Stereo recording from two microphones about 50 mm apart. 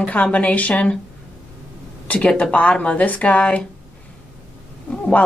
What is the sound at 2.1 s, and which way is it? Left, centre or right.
A woman's voice, left.